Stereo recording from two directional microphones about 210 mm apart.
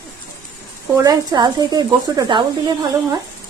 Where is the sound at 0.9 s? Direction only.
15° right (ahead or behind).